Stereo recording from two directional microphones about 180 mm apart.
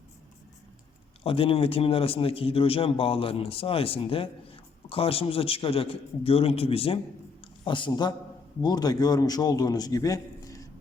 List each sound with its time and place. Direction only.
1.2 s a man's voice: 30° left (ahead or behind)